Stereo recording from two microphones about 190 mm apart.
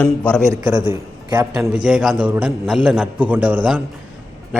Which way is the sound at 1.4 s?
5° right (ahead or behind).